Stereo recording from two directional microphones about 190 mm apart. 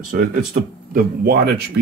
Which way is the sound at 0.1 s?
45° right (ahead or behind).